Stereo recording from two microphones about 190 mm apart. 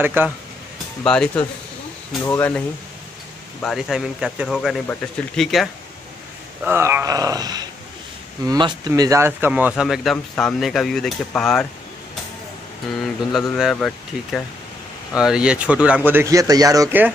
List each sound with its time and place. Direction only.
0.0 s speech: 10° right (ahead or behind)
1.0 s speech: 5° left (ahead or behind)
3.6 s speech: centre (ahead or behind)
6.6 s speech: 10° right (ahead or behind)
13.6 s speech: centre (ahead or behind); by 17.1 s 15° right (ahead or behind)